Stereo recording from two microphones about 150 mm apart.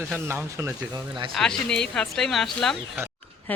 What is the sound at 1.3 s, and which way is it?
A woman's voice, 5° left (ahead or behind).